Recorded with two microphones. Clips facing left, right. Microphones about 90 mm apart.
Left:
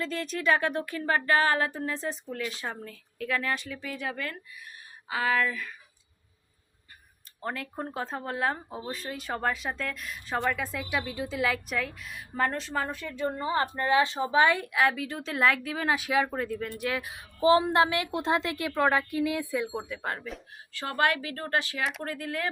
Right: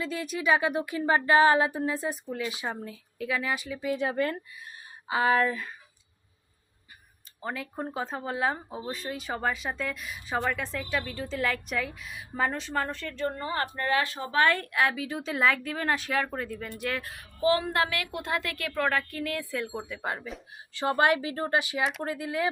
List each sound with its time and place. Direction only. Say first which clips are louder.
0.0 s a sound: even; 5° right (ahead or behind); by 4.4 s 30° right (ahead or behind)
5.0 s speech: right 3 dB; 25° right (ahead or behind)
7.4 s speech: even; centre (ahead or behind); by 14.7 s 15° left (ahead or behind)
14.7 s speech: left 1 dB; centre (ahead or behind)
17.1 s a woman's voice: left 4 dB; 20° left (ahead or behind)
19.7 s speech: even; centre (ahead or behind)
20.7 s speech: right 3 dB; 20° right (ahead or behind)
22.0 s a sound: right 3 dB; 15° right (ahead or behind)